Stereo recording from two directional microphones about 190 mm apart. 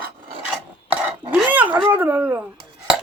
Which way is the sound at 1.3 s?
10° right (ahead or behind).